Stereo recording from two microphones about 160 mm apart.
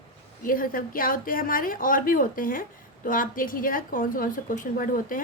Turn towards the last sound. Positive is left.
turn(degrees=60)  # may be behind; listen again after turning